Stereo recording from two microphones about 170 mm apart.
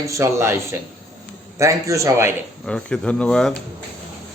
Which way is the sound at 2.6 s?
5° left (ahead or behind).